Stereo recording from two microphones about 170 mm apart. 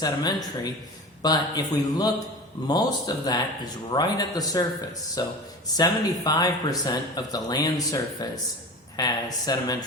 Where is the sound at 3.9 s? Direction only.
20° left (ahead or behind).